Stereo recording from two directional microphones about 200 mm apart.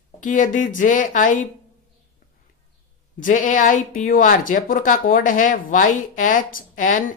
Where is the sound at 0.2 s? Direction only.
40° left (ahead or behind).